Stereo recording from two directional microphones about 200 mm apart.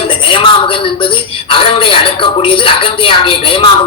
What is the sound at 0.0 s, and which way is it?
A woman's voice, 25° left (ahead or behind).